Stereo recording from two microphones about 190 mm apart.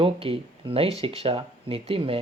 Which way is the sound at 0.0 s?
30° right (ahead or behind).